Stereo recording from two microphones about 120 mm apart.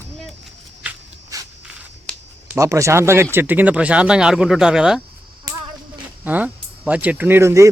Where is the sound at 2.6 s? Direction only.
25° right (ahead or behind); by 5.0 s 5° right (ahead or behind).